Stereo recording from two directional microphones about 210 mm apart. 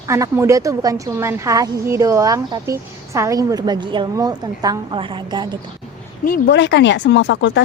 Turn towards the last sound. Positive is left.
turn(degrees=60)  # may be behind; listen again after turning